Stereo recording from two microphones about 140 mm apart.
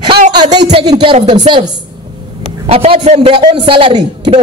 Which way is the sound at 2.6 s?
40° right (ahead or behind).